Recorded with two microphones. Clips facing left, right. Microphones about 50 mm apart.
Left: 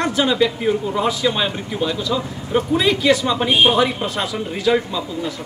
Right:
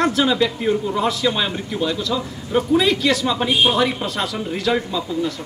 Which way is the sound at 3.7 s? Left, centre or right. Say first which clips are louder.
Left 1 dB; centre.